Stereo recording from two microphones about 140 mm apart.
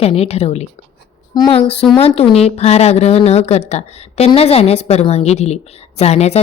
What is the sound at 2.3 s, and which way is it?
A woman's voice, 45° left (ahead or behind).